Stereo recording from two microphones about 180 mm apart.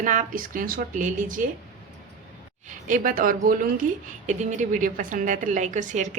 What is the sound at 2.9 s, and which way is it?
A woman's voice, 50° right (ahead or behind).